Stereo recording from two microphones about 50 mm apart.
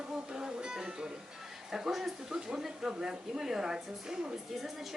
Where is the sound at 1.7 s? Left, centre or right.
Centre.